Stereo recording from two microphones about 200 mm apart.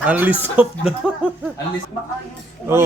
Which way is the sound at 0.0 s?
5° right (ahead or behind).